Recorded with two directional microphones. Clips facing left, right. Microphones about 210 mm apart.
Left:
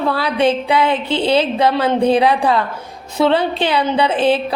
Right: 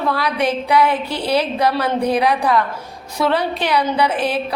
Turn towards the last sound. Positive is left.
turn(degrees=25)  # may be behind; listen again after turning